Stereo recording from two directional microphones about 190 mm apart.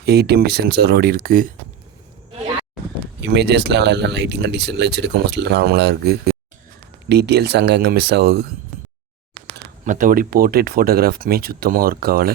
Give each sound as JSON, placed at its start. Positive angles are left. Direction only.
{"t": 0.0, "sound": "speech", "side_deg": -55}
{"t": 3.2, "sound": "speech", "side_deg": -60}
{"t": 9.8, "sound": "speech", "side_deg": -45}